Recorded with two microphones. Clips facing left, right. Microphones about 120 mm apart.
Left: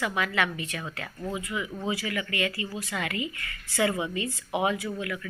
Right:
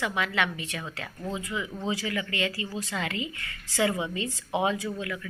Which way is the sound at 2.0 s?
25° right (ahead or behind).